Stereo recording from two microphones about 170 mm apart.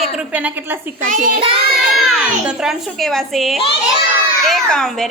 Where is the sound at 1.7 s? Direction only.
Centre (ahead or behind).